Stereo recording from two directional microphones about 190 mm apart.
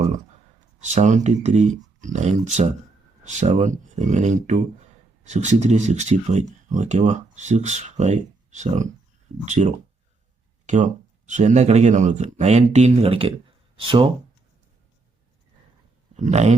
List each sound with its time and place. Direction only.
0.8 s speech: 40° right (ahead or behind)
16.1 s speech: 40° right (ahead or behind)